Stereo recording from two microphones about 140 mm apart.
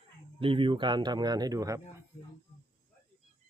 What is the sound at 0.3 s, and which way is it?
Speech, 40° right (ahead or behind).